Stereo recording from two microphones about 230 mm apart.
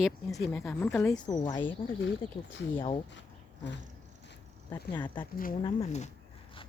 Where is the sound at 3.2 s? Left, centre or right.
Left.